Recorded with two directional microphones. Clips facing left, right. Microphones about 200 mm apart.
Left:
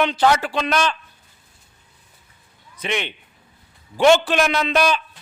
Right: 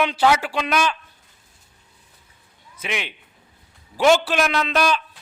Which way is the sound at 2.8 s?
5° right (ahead or behind).